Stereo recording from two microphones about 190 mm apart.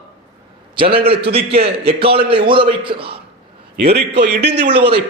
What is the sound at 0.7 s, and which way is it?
A man's voice, 30° right (ahead or behind).